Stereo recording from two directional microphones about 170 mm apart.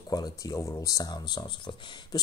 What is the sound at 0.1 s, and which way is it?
Speech, 20° left (ahead or behind).